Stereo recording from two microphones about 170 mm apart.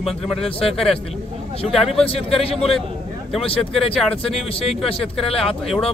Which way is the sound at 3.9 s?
5° left (ahead or behind).